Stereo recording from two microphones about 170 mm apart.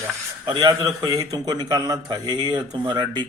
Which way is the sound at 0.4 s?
25° right (ahead or behind).